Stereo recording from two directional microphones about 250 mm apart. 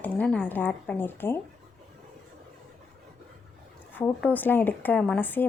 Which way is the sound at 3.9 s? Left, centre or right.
Centre.